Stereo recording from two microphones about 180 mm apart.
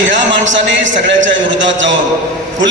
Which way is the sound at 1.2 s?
90° right.